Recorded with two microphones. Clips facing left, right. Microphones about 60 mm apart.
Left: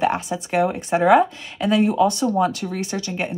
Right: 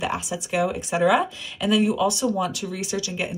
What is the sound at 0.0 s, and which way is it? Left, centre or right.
Speech, left.